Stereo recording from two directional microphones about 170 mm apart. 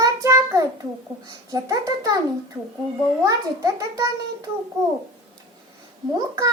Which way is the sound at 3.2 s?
20° right (ahead or behind).